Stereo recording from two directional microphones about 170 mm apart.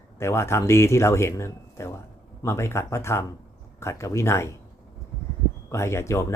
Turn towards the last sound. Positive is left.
turn(degrees=15)  # may be behind; listen again after turning